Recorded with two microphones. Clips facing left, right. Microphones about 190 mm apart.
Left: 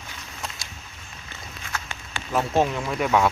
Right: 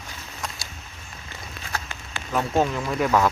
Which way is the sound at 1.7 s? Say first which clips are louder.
Right 2 dB; 35° right (ahead or behind).